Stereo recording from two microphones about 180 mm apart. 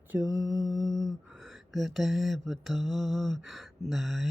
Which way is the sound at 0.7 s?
Centre (ahead or behind).